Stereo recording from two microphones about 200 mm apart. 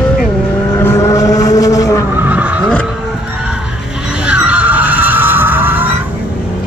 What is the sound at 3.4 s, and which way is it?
Music, 5° right (ahead or behind).